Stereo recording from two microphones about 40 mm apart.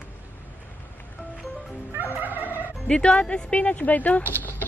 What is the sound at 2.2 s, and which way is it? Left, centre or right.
Speech, right.